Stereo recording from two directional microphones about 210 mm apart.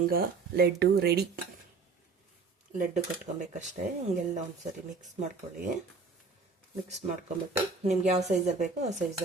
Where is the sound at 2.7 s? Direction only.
35° right (ahead or behind).